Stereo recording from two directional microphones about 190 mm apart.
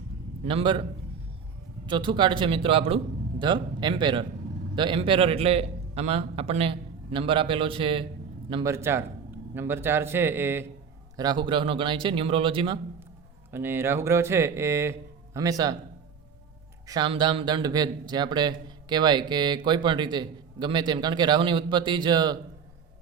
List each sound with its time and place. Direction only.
0.4 s speech: 25° right (ahead or behind)
1.9 s a man's voice: 25° right (ahead or behind)
8.7 s speech: 15° right (ahead or behind)
11.2 s speech: 25° right (ahead or behind)
13.5 s speech: 10° right (ahead or behind)
16.8 s speech: 20° right (ahead or behind)